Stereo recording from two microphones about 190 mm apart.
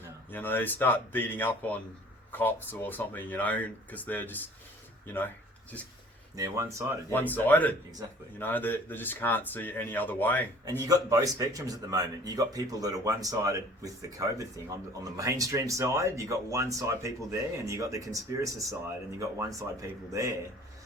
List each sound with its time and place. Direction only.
0.3 s speech: 10° left (ahead or behind)
6.3 s speech: 15° right (ahead or behind)
7.1 s speech: 10° left (ahead or behind)
8.0 s speech: 20° right (ahead or behind)
8.4 s speech: 10° left (ahead or behind)
10.7 s speech: 15° right (ahead or behind)